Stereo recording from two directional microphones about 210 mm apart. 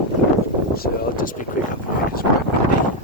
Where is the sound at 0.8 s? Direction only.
40° left (ahead or behind).